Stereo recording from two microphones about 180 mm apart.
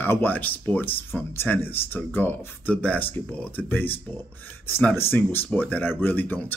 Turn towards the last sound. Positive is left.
turn(degrees=10)  # may be behind; listen again after turning